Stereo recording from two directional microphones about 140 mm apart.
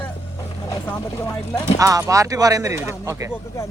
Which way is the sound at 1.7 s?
25° right (ahead or behind).